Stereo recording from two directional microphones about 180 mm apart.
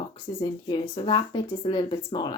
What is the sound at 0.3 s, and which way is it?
Speech, 20° left (ahead or behind).